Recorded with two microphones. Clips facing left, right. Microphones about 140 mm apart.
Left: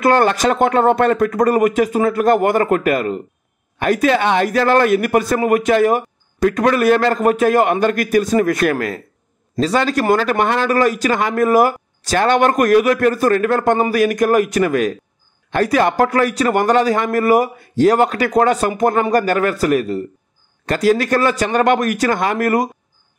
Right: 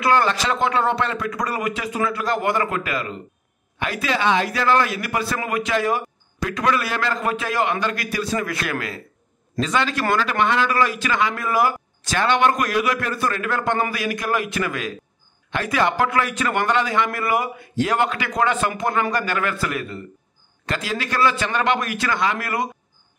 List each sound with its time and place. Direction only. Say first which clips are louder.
0.0 s a man's voice: left 6 dB; 50° left (ahead or behind)